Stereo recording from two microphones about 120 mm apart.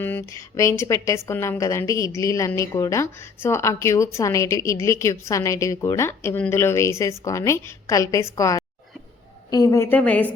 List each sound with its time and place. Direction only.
0.0 s speech: 15° left (ahead or behind)
0.3 s a woman's voice: 25° left (ahead or behind)